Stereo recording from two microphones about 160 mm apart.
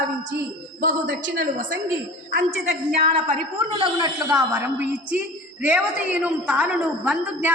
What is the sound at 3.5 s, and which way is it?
A woman's voice, 30° right (ahead or behind).